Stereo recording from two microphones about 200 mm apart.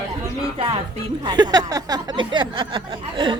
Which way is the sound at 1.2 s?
20° right (ahead or behind).